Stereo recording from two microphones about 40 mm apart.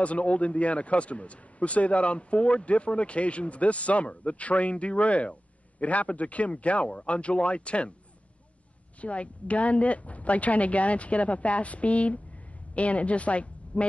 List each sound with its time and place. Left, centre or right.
0.0 s a man's voice: left
9.0 s a man's voice: left